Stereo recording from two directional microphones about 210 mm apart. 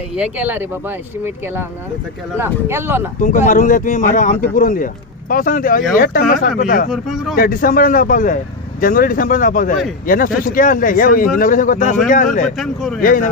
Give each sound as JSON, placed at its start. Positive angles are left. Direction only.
{"t": 0.2, "sound": "speech", "side_deg": -10}
{"t": 3.2, "sound": "speech", "side_deg": 35}
{"t": 6.9, "sound": "speech", "side_deg": 0}
{"t": 7.3, "sound": "speech", "side_deg": 45}
{"t": 12.5, "sound": "speech", "side_deg": 0}
{"t": 13.0, "sound": "speech", "side_deg": 40}